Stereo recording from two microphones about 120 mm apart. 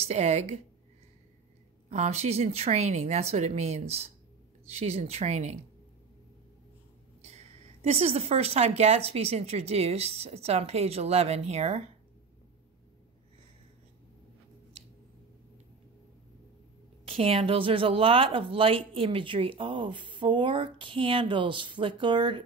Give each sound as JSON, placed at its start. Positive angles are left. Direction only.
{"t": 0.0, "sound": "a woman's voice", "side_deg": -70}
{"t": 1.9, "sound": "speech", "side_deg": -65}
{"t": 7.2, "sound": "speech", "side_deg": -65}
{"t": 17.0, "sound": "speech", "side_deg": -50}